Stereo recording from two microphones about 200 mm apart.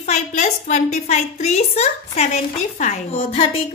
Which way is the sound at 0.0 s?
35° left (ahead or behind).